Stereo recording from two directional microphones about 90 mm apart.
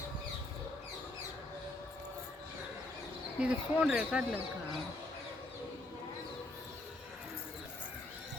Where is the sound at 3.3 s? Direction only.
10° right (ahead or behind).